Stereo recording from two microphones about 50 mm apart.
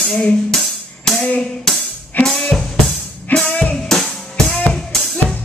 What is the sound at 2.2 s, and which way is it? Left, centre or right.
Drum kit, centre.